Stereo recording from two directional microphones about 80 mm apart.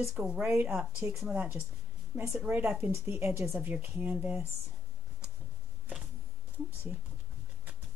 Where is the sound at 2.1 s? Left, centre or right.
Centre.